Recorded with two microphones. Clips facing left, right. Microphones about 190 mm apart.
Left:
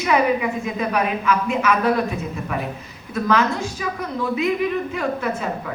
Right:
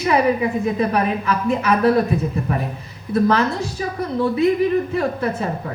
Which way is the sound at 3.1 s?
35° right (ahead or behind).